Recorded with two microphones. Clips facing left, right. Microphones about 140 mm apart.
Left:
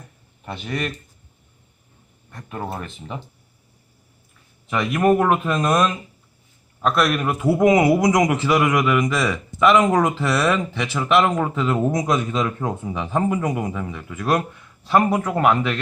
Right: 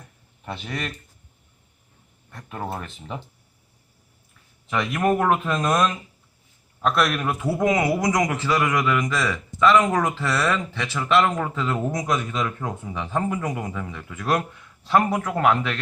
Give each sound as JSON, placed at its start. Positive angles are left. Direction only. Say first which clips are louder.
{"t": 0.4, "sound": "speech", "louder": "left 4 dB", "side_deg": 0}
{"t": 2.3, "sound": "speech", "louder": "left 1 dB", "side_deg": 0}
{"t": 4.7, "sound": "a man's voice", "louder": "left 4 dB", "side_deg": 5}